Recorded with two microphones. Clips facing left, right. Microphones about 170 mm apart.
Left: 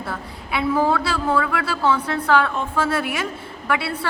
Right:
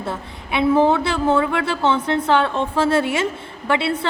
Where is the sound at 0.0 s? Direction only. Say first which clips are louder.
Right 3 dB; 25° right (ahead or behind).